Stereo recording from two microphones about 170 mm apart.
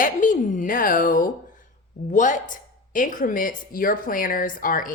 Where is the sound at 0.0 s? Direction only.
50° left (ahead or behind).